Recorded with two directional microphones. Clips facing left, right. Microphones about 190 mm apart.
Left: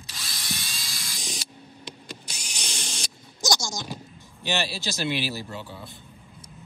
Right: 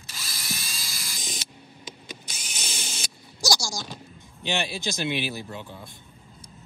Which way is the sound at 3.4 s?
20° left (ahead or behind).